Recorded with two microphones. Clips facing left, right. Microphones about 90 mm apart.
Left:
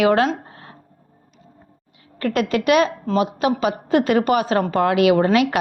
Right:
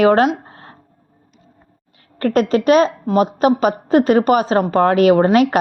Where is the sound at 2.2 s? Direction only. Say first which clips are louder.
Right 5 dB; 40° right (ahead or behind).